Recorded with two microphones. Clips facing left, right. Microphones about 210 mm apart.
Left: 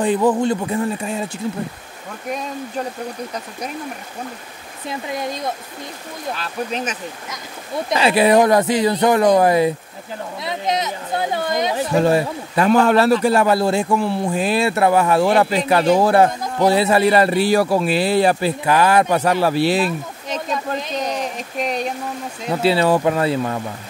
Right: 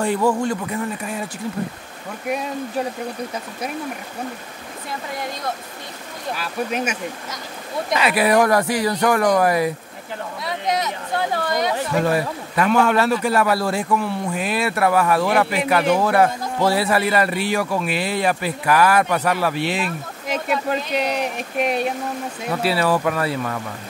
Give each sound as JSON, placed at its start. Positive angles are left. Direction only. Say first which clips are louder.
{"t": 0.0, "sound": "speech", "louder": "left 3 dB", "side_deg": 20}
{"t": 6.3, "sound": "speech", "louder": "right 2 dB", "side_deg": -10}
{"t": 7.9, "sound": "speech", "louder": "left 4 dB", "side_deg": 25}
{"t": 20.2, "sound": "speech", "louder": "right 2 dB", "side_deg": -10}
{"t": 22.5, "sound": "speech", "louder": "left 4 dB", "side_deg": 25}